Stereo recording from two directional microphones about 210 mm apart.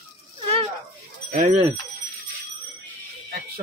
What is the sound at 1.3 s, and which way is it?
Speech, 40° right (ahead or behind).